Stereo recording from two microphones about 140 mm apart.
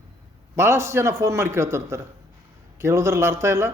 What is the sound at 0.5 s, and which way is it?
A man's voice, 20° right (ahead or behind).